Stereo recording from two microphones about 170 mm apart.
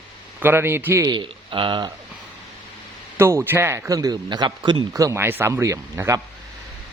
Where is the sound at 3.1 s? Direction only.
15° right (ahead or behind).